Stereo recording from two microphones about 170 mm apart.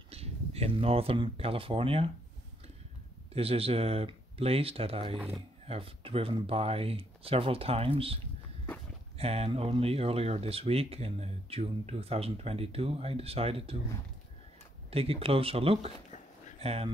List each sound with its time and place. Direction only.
0.1 s speech: 35° right (ahead or behind)
3.3 s speech: 35° right (ahead or behind)
9.2 s speech: 35° right (ahead or behind)
14.9 s speech: 35° right (ahead or behind)